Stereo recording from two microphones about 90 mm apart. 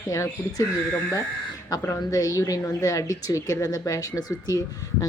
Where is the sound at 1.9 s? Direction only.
40° left (ahead or behind).